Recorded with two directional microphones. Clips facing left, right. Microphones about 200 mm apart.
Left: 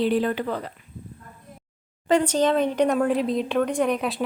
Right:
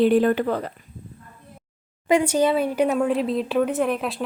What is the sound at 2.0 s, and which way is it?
Speech, 10° right (ahead or behind).